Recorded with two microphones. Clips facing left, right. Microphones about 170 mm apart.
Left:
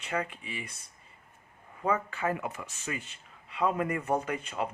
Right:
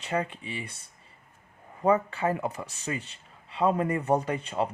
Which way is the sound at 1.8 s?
35° right (ahead or behind).